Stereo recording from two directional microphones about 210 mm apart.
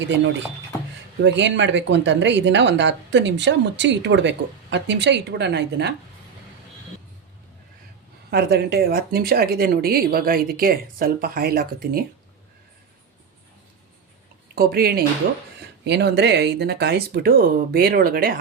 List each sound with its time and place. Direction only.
1.2 s speech: 60° right (ahead or behind)
8.3 s speech: 50° right (ahead or behind)
14.5 s speech: 45° right (ahead or behind)